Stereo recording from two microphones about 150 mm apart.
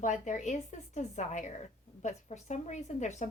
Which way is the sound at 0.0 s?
55° left (ahead or behind).